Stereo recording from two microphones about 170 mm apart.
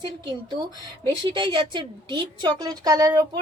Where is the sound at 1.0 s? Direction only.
30° right (ahead or behind).